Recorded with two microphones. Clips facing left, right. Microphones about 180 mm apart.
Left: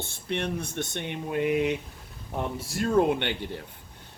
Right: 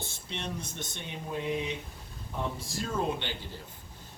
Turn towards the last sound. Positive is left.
turn(degrees=65)  # may be behind; listen again after turning